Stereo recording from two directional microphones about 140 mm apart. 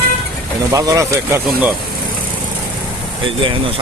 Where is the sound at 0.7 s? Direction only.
25° right (ahead or behind).